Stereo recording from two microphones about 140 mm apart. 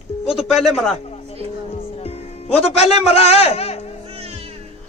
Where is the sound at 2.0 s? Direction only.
45° left (ahead or behind).